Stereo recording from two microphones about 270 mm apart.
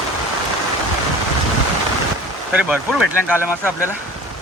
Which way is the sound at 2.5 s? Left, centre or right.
Centre.